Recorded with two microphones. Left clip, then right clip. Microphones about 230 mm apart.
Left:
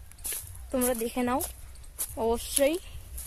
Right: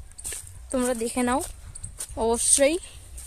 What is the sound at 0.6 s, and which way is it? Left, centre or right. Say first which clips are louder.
Speech: right 3 dB; centre.